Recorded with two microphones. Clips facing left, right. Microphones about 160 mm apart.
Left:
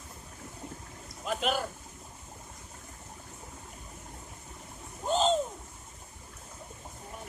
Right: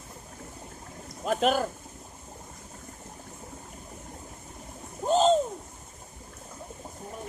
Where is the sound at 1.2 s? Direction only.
45° right (ahead or behind).